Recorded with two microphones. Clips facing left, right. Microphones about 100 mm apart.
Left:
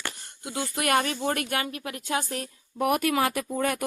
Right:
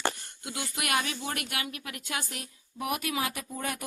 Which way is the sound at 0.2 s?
30° left (ahead or behind).